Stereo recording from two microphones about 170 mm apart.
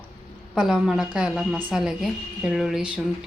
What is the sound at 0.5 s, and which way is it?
A woman's voice, 5° right (ahead or behind).